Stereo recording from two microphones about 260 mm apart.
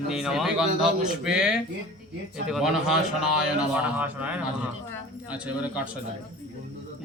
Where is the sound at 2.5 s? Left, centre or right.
Centre.